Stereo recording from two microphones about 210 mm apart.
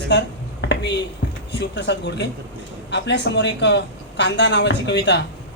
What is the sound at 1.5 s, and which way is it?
Speech, 55° left (ahead or behind).